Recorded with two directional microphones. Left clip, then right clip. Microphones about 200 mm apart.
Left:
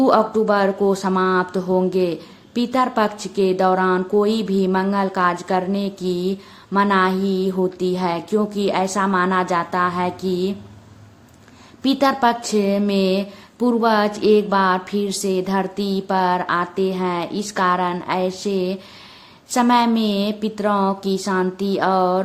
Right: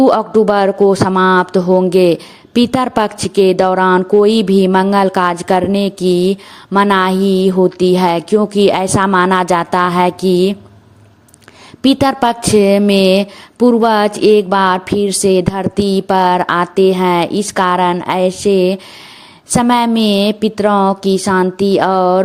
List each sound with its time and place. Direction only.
0.0 s speech: 35° right (ahead or behind)
11.8 s speech: 40° right (ahead or behind)